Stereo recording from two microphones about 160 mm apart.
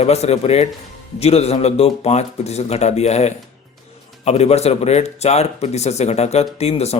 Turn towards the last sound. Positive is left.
turn(degrees=40)  # may be behind; listen again after turning